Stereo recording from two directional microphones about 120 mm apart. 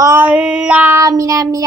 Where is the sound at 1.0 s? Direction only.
25° right (ahead or behind).